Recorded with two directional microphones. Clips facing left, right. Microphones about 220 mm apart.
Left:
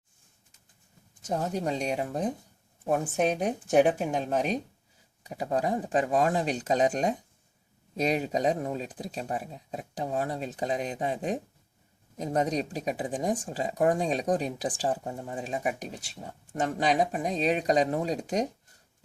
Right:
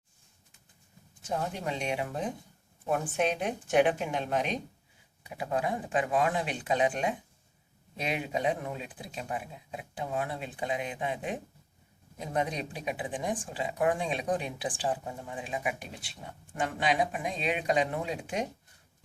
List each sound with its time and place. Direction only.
1.2 s speech: 40° left (ahead or behind)